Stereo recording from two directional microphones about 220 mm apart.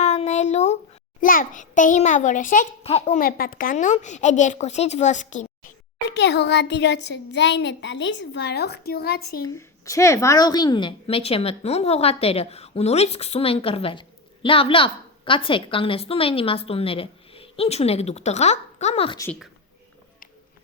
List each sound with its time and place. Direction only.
0.0 s a sound: 30° left (ahead or behind)
1.2 s a child's voice: 40° left (ahead or behind)
6.1 s a child's voice: 50° left (ahead or behind)
9.4 s a woman's voice: 15° left (ahead or behind)